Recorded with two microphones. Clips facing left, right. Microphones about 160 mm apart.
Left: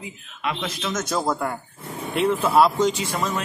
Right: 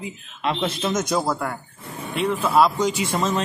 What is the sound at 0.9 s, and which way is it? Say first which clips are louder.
Speech: left 1 dB; 15° right (ahead or behind).